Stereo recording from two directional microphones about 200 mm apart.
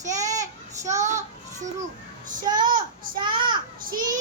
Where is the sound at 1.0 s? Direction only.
35° right (ahead or behind).